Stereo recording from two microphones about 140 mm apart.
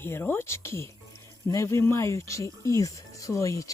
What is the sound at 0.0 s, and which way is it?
Speech, 15° left (ahead or behind).